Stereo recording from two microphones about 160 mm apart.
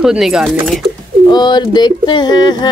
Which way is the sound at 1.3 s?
25° left (ahead or behind).